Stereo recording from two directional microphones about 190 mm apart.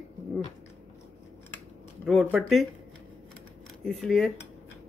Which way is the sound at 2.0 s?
Centre (ahead or behind).